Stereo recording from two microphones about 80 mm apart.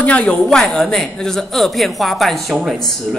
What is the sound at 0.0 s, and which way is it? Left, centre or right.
A woman's voice, centre.